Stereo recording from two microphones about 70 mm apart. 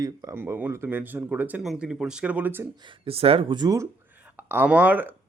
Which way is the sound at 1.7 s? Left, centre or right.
Centre.